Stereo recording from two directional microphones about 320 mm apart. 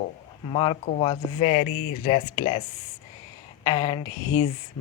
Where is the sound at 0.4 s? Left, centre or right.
Centre.